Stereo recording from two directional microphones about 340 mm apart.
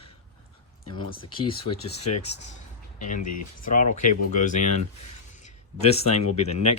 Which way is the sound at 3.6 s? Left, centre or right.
Left.